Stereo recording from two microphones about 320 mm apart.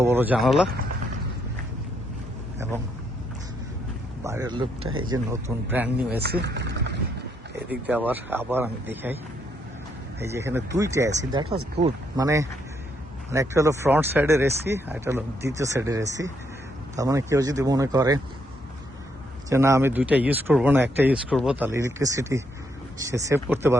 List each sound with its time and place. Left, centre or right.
0.0 s speech: centre
4.2 s speech: centre
6.1 s speech: right
7.7 s speech: centre
10.2 s speech: centre
19.5 s speech: centre